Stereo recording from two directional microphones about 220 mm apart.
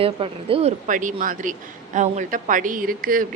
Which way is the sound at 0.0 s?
25° right (ahead or behind).